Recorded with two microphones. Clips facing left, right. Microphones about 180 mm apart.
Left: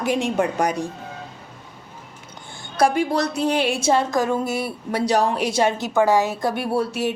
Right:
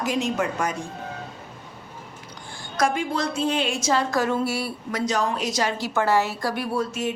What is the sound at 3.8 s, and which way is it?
Speech, 25° left (ahead or behind).